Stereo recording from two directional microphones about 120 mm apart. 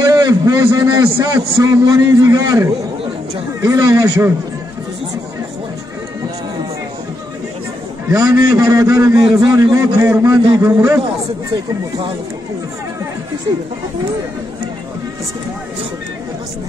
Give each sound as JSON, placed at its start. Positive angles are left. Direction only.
{"t": 0.0, "sound": "a man's voice", "side_deg": -30}
{"t": 8.2, "sound": "a man's voice", "side_deg": -30}